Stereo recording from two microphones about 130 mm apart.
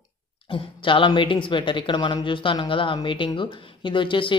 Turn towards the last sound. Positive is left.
turn(degrees=40)  # may be behind; listen again after turning